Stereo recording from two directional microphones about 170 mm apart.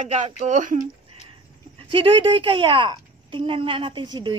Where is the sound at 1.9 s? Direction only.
30° right (ahead or behind).